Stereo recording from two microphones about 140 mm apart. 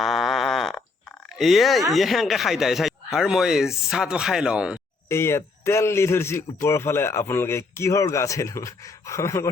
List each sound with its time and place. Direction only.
0.0 s a sound: centre (ahead or behind)
1.4 s speech: centre (ahead or behind)
5.0 s speech: 20° left (ahead or behind)